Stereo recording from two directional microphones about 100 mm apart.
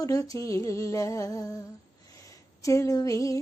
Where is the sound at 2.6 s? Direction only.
30° left (ahead or behind).